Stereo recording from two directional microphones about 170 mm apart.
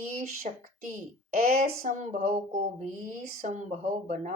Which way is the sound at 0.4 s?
50° right (ahead or behind).